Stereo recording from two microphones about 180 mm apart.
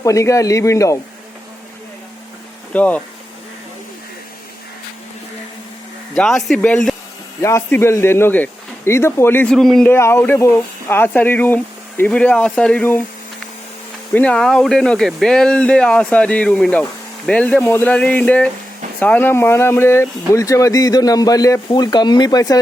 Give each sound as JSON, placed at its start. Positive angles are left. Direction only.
{"t": 0.0, "sound": "speech", "side_deg": 15}
{"t": 2.7, "sound": "speech", "side_deg": 10}
{"t": 6.1, "sound": "speech", "side_deg": 0}
{"t": 9.9, "sound": "speech", "side_deg": 15}
{"t": 14.1, "sound": "speech", "side_deg": 5}